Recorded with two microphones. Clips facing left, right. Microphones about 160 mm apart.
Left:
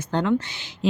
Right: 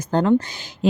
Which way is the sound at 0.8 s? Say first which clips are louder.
Right 4 dB; 45° right (ahead or behind).